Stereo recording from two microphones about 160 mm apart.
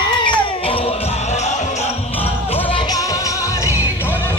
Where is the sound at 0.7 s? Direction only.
35° left (ahead or behind).